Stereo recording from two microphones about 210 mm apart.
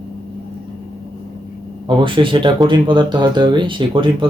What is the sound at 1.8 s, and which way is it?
Speech, 25° right (ahead or behind).